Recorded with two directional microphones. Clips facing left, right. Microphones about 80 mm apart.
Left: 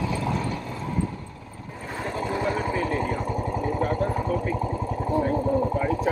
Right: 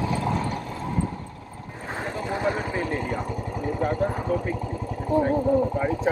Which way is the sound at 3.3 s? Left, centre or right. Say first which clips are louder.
Left 3 dB; left.